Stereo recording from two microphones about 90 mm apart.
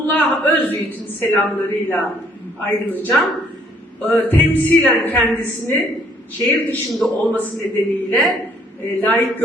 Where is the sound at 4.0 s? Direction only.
20° left (ahead or behind).